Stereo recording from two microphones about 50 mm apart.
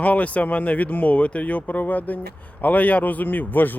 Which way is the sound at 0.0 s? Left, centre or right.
Left.